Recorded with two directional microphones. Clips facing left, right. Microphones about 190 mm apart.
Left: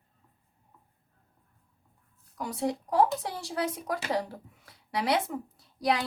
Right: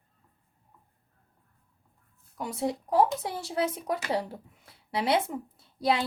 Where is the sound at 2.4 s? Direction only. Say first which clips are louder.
Even; 25° right (ahead or behind).